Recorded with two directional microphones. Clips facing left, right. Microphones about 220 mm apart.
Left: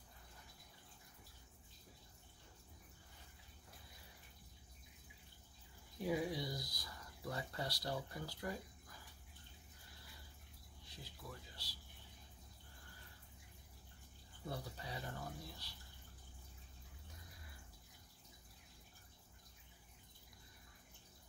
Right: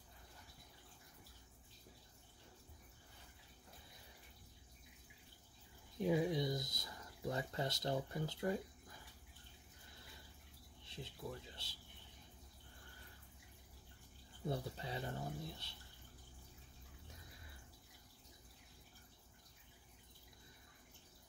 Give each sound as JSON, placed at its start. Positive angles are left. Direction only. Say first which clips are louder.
{"t": 6.0, "sound": "a sound", "louder": "right 4 dB", "side_deg": -20}
{"t": 10.9, "sound": "speech", "louder": "right 6 dB", "side_deg": -25}
{"t": 14.5, "sound": "speech", "louder": "right 4 dB", "side_deg": -25}